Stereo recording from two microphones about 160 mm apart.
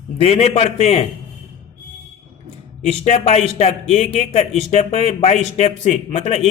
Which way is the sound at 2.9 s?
45° left (ahead or behind).